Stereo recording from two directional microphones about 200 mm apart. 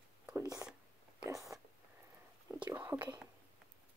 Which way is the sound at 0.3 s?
15° right (ahead or behind).